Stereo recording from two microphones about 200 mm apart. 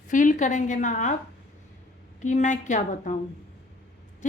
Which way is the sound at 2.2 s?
35° left (ahead or behind).